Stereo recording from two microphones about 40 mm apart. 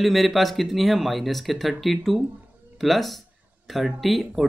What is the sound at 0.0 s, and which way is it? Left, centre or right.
Speech, centre.